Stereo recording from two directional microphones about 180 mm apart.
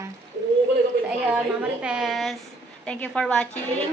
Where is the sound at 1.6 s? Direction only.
5° right (ahead or behind).